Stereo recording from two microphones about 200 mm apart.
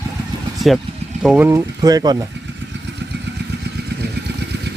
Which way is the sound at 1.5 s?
20° right (ahead or behind).